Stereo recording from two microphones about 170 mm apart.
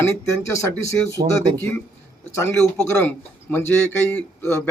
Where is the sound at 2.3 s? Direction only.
15° left (ahead or behind).